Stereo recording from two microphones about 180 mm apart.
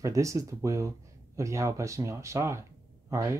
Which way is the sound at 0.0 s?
15° right (ahead or behind).